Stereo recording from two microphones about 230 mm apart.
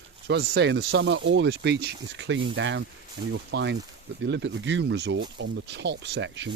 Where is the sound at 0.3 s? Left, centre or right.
Right.